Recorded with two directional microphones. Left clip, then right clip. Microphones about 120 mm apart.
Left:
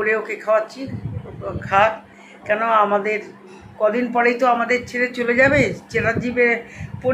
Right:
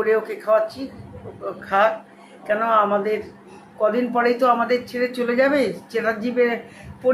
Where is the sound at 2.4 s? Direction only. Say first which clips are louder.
Left 2 dB; 20° right (ahead or behind).